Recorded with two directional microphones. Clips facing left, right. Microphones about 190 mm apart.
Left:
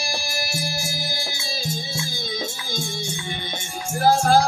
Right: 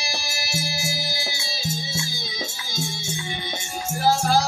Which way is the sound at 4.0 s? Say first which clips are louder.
Left 4 dB; 55° left (ahead or behind).